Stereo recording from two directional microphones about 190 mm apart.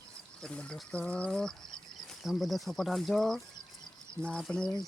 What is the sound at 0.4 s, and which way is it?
Speech, 5° left (ahead or behind).